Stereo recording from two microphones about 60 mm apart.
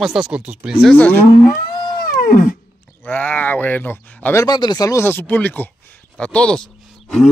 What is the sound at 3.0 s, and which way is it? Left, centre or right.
Speech, left.